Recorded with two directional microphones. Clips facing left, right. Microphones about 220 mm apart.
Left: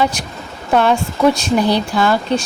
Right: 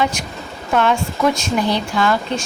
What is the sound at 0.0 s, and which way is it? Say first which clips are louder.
A woman's voice: left 2 dB; 35° left (ahead or behind).